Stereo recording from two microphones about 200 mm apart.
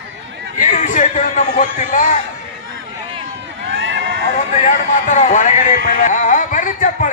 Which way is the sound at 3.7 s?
70° right (ahead or behind).